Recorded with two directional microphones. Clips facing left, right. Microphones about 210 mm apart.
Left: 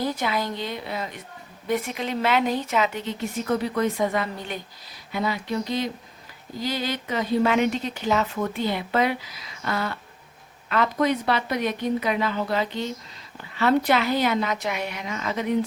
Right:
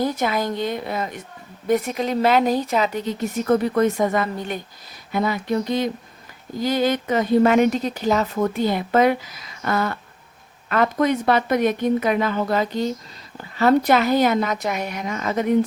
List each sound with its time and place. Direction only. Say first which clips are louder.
0.0 s a woman's voice: right 4 dB; 45° right (ahead or behind)